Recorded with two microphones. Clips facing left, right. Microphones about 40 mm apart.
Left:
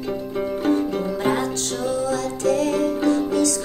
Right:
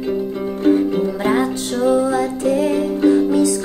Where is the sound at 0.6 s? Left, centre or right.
Centre.